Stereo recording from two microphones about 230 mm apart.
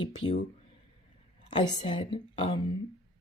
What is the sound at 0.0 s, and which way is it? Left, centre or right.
Speech, left.